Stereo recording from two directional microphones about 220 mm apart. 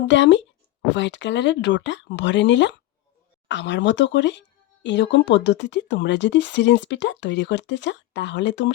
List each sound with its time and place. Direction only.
0.1 s speech: 55° left (ahead or behind)